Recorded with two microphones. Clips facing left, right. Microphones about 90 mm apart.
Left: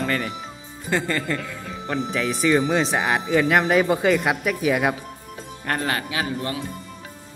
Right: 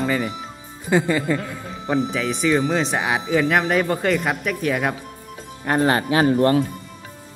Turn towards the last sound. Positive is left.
turn(degrees=-45)  # may be behind; listen again after turning